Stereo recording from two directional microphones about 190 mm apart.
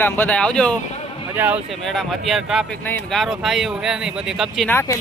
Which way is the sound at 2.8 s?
10° left (ahead or behind).